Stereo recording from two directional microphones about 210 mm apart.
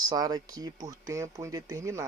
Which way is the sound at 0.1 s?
20° right (ahead or behind).